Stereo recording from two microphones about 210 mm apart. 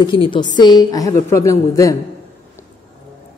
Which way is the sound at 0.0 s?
25° left (ahead or behind).